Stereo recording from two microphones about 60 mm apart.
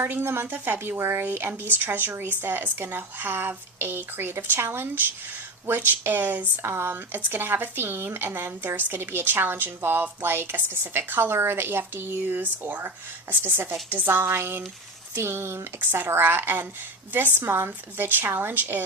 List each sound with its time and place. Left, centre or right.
0.2 s a woman's voice: right
6.7 s a woman's voice: right